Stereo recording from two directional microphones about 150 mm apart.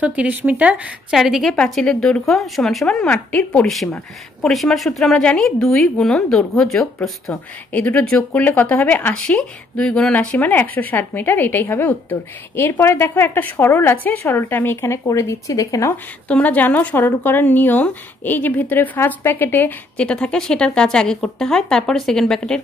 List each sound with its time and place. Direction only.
0.0 s a woman's voice: 10° right (ahead or behind); by 16.0 s 20° left (ahead or behind)
16.3 s speech: 10° left (ahead or behind)